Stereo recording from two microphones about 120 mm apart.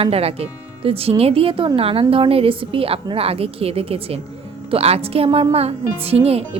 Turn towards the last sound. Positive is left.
turn(degrees=-55)  # may be behind; listen again after turning